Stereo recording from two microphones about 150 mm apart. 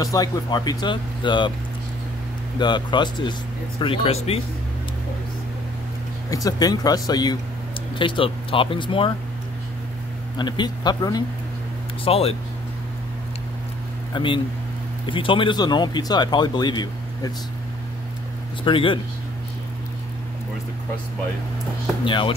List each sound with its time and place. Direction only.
0.0 s speech: 25° left (ahead or behind)
2.6 s speech: 30° left (ahead or behind)
6.3 s speech: 25° left (ahead or behind)
10.3 s speech: 30° left (ahead or behind)
12.0 s speech: 40° left (ahead or behind)
14.1 s speech: 35° left (ahead or behind)
18.6 s speech: 35° left (ahead or behind)
22.0 s speech: 35° left (ahead or behind)